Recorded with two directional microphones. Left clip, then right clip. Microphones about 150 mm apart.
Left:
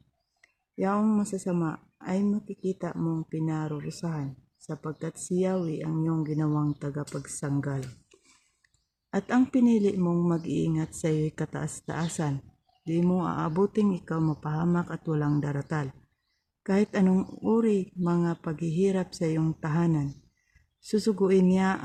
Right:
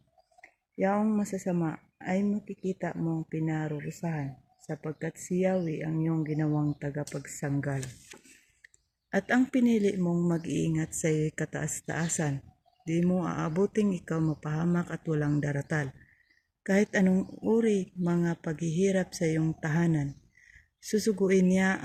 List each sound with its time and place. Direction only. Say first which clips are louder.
0.8 s speech: left 1 dB; 10° left (ahead or behind)
9.0 s a woman's voice: even; 5° left (ahead or behind)
9.8 s speech: left 2 dB; 20° left (ahead or behind)
12.9 s speech: left 2 dB; 20° left (ahead or behind)